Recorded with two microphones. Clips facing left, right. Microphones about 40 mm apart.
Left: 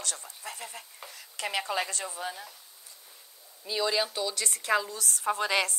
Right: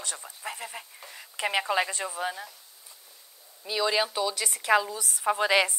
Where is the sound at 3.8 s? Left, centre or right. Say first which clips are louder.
Right 3 dB; centre.